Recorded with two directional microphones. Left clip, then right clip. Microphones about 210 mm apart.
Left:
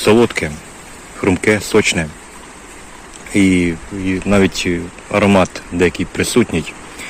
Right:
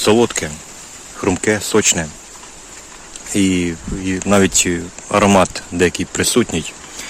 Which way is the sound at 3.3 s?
10° right (ahead or behind).